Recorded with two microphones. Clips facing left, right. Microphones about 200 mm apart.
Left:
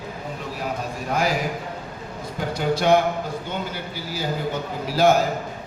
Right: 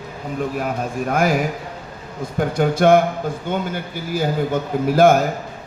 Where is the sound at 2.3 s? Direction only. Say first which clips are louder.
Right 5 dB; 50° right (ahead or behind).